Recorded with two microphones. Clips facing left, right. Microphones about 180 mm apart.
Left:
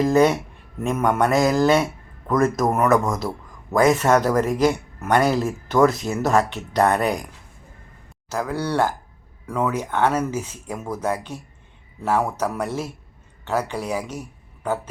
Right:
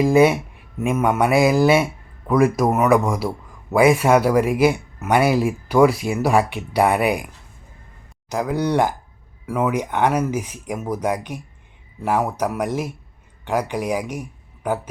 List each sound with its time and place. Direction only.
0.0 s a man's voice: 10° right (ahead or behind)
8.3 s a man's voice: 15° right (ahead or behind)